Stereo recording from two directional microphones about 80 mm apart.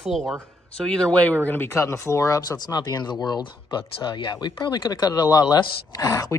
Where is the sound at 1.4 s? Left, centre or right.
Left.